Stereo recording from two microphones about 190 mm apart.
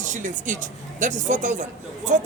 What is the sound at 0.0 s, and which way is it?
Speech, 40° right (ahead or behind).